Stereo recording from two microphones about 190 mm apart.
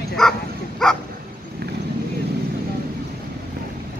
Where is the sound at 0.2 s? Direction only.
5° left (ahead or behind).